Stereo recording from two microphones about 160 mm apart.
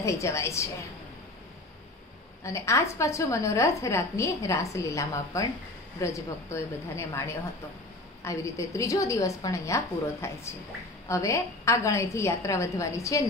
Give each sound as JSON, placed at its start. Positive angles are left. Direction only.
{"t": 0.0, "sound": "a woman's voice", "side_deg": 20}
{"t": 2.4, "sound": "a woman's voice", "side_deg": 20}